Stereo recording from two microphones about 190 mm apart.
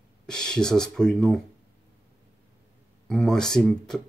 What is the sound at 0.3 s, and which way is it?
Speech, 5° left (ahead or behind).